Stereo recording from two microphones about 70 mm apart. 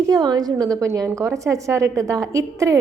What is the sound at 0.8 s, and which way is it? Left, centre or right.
A woman's voice, right.